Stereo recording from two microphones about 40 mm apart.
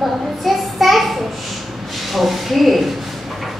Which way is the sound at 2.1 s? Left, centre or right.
Centre.